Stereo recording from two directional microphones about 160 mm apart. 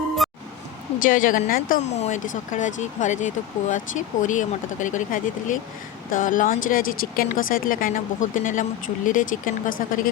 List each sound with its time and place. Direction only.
0.2 s music: centre (ahead or behind)
0.9 s speech: 55° left (ahead or behind)
2.0 s speech: 50° left (ahead or behind)